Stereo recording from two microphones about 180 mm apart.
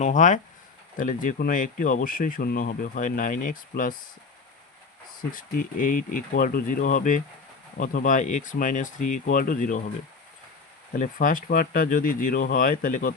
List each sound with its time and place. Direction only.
0.0 s speech: 45° left (ahead or behind)
5.3 s speech: 50° left (ahead or behind)
10.9 s speech: 45° left (ahead or behind)